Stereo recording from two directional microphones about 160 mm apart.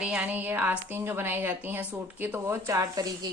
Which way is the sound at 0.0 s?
10° right (ahead or behind).